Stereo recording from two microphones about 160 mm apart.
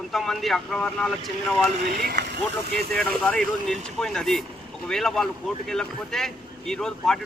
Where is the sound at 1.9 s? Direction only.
70° right (ahead or behind).